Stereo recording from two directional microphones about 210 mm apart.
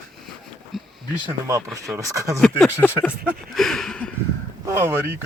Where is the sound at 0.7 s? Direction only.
Centre (ahead or behind).